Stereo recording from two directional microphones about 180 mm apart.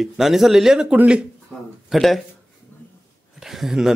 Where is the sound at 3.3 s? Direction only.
Centre (ahead or behind).